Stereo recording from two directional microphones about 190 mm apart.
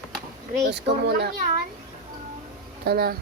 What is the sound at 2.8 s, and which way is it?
Speech, 55° right (ahead or behind).